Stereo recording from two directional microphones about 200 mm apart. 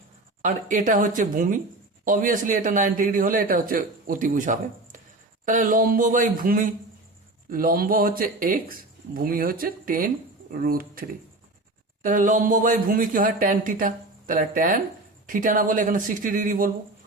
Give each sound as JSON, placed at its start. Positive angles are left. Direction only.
{"t": 0.4, "sound": "speech", "side_deg": -40}
{"t": 12.0, "sound": "speech", "side_deg": -40}